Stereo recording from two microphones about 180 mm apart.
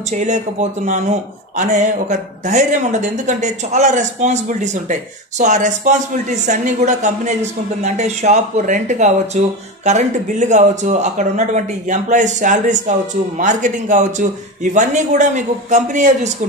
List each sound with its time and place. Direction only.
0.1 s a man's voice: 40° right (ahead or behind)